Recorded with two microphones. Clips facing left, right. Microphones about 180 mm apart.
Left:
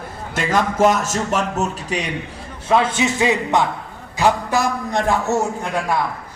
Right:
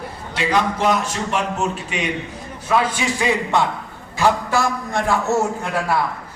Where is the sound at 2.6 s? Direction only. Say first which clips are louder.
Left 2 dB; 25° left (ahead or behind).